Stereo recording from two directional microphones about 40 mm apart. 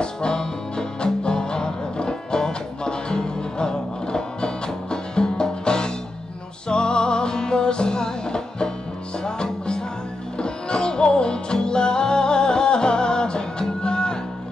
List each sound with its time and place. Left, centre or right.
0.0 s music: left